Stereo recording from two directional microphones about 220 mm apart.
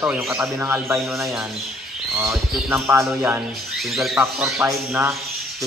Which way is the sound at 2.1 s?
10° right (ahead or behind).